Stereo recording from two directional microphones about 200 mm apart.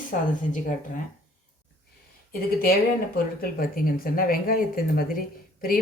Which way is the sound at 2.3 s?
50° left (ahead or behind).